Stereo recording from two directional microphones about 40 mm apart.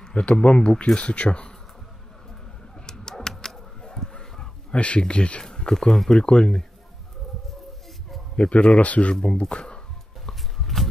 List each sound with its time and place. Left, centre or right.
0.1 s speech: left
2.9 s dog: centre
4.7 s speech: left
5.9 s speech: centre
6.1 s speech: left
8.4 s speech: left
9.1 s speech: left
10.2 s a sound: centre